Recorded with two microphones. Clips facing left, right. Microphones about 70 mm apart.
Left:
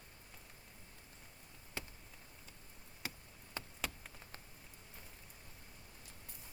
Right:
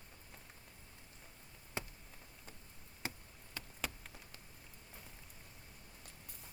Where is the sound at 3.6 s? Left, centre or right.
Left.